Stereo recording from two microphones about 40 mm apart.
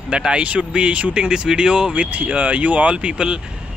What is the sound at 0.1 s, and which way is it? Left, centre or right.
Speech, right.